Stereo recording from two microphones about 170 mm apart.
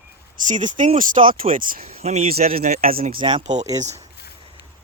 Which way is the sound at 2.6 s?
60° right (ahead or behind).